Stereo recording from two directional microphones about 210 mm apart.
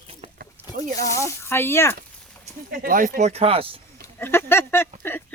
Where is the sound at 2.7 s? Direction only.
40° right (ahead or behind).